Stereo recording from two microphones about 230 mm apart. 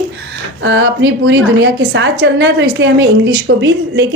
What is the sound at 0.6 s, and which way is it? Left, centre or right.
A woman's voice, right.